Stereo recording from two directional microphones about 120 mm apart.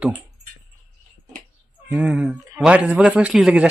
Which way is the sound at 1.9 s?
10° right (ahead or behind).